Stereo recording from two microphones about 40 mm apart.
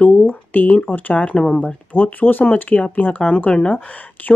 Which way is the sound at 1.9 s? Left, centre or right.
Left.